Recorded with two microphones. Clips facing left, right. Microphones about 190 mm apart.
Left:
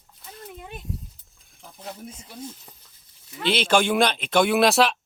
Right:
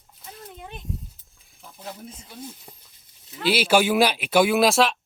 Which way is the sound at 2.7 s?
20° right (ahead or behind).